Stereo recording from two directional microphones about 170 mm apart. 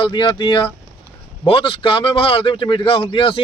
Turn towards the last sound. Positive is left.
turn(degrees=30)  # may be behind; listen again after turning